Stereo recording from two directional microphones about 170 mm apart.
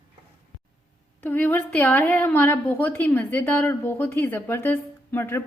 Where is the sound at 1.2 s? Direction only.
10° left (ahead or behind).